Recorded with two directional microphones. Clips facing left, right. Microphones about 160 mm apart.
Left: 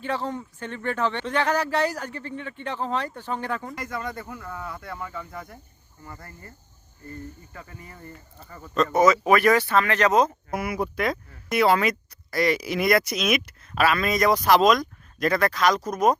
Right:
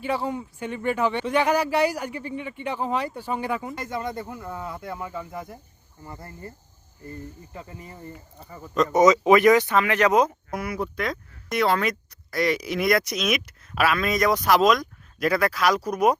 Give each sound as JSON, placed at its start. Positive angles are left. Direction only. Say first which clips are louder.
{"t": 0.0, "sound": "speech", "louder": "right 2 dB", "side_deg": -10}
{"t": 3.8, "sound": "speech", "louder": "right 2 dB", "side_deg": -25}
{"t": 10.5, "sound": "speech", "louder": "left 1 dB", "side_deg": 10}